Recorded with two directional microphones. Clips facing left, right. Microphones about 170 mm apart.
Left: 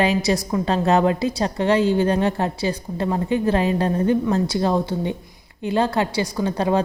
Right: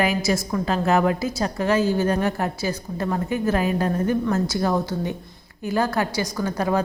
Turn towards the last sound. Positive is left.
turn(degrees=30)  # may be behind; listen again after turning